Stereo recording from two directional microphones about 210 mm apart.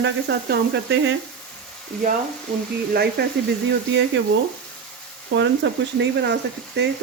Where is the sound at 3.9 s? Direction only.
60° right (ahead or behind).